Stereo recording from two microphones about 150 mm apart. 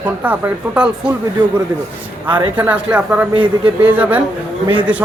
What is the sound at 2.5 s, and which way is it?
Speech, 10° right (ahead or behind).